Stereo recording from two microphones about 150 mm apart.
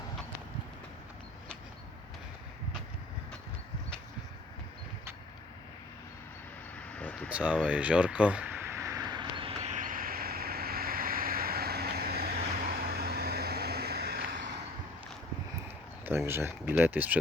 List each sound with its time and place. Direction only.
6.7 s vehicle: 10° left (ahead or behind)
7.3 s speech: 10° right (ahead or behind)
7.7 s a sound: 10° right (ahead or behind); by 12.4 s 90° right
12.6 s vehicle: 90° right
16.0 s speech: 15° right (ahead or behind)